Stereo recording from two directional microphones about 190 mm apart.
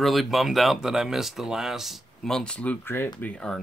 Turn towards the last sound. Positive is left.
turn(degrees=5)  # may be behind; listen again after turning